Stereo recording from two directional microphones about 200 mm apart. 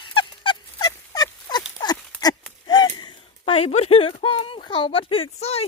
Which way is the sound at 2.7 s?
20° left (ahead or behind).